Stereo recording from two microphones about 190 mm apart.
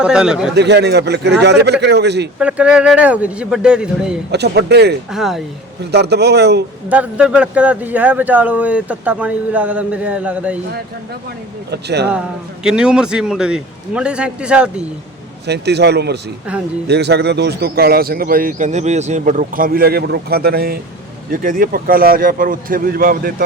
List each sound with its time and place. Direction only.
0.0 s a man's voice: 5° right (ahead or behind)
0.5 s speech: 60° right (ahead or behind)
2.4 s a man's voice: 5° right (ahead or behind)
4.3 s speech: 60° right (ahead or behind)
5.1 s a man's voice: centre (ahead or behind)
5.9 s speech: 60° right (ahead or behind)
6.8 s a man's voice: 5° right (ahead or behind)
11.7 s speech: 60° right (ahead or behind)
12.6 s a man's voice: 5° right (ahead or behind)
15.4 s speech: 60° right (ahead or behind)